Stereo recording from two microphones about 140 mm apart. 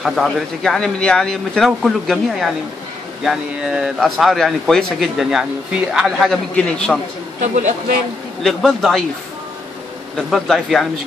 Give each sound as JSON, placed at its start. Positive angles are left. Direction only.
{"t": 0.0, "sound": "speech", "side_deg": 0}
{"t": 7.3, "sound": "a man's voice", "side_deg": -65}
{"t": 8.4, "sound": "speech", "side_deg": 0}
{"t": 10.1, "sound": "speech", "side_deg": 0}